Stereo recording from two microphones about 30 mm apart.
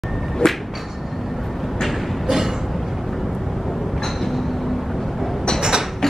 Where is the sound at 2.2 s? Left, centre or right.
Centre.